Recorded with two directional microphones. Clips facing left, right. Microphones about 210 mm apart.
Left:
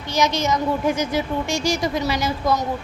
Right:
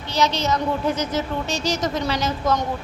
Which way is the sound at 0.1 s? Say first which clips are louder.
Left 1 dB; 15° left (ahead or behind).